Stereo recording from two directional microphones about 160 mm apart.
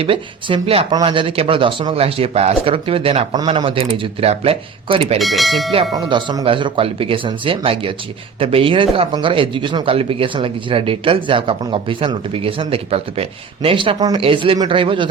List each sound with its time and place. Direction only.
0.0 s speech: 35° right (ahead or behind)
5.2 s speech: centre (ahead or behind)
5.9 s speech: 30° right (ahead or behind)